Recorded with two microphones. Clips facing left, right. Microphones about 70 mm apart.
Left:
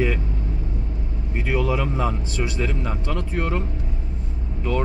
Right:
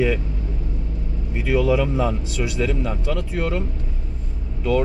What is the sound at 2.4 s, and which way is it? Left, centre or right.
Speech, centre.